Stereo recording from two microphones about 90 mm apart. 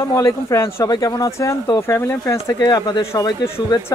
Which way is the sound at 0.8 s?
45° left (ahead or behind).